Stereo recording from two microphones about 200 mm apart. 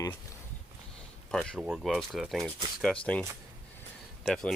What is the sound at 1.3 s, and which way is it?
Speech, centre (ahead or behind).